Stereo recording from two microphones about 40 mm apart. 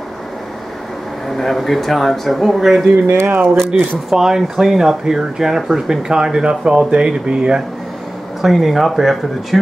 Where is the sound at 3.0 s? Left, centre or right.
Right.